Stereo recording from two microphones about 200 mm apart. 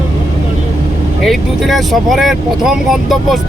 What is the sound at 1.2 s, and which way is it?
Speech, centre (ahead or behind).